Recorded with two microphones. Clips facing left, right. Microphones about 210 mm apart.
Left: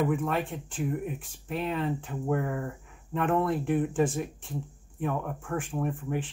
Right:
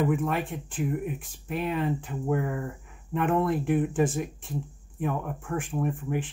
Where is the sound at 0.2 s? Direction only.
15° right (ahead or behind).